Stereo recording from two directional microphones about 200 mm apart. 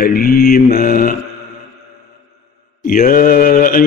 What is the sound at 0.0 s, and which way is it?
Speech, 45° left (ahead or behind).